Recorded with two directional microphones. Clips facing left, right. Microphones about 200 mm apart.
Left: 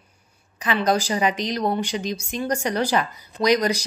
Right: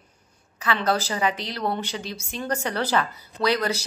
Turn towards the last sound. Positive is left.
turn(degrees=15)  # may be behind; listen again after turning